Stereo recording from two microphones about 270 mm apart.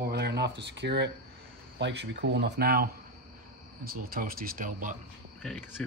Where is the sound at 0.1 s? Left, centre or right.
Right.